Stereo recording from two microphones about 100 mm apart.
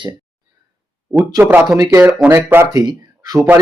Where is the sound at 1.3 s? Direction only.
20° right (ahead or behind).